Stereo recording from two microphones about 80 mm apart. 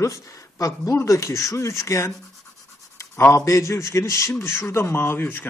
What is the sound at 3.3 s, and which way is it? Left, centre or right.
A man's voice, left.